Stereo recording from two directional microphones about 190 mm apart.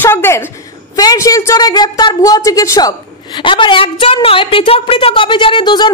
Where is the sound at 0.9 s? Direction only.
20° left (ahead or behind).